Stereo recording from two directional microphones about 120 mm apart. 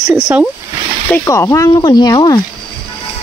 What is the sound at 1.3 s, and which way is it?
Speech, 25° left (ahead or behind).